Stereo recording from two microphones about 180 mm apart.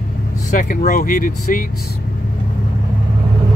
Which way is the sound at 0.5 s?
45° left (ahead or behind).